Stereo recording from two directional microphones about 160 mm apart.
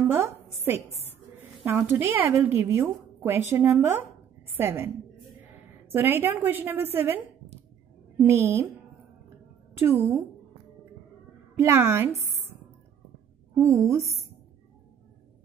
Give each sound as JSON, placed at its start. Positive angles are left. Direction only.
{"t": 0.7, "sound": "a woman's voice", "side_deg": -15}
{"t": 9.8, "sound": "a woman's voice", "side_deg": -15}
{"t": 11.5, "sound": "a woman's voice", "side_deg": -15}
{"t": 13.6, "sound": "a woman's voice", "side_deg": -20}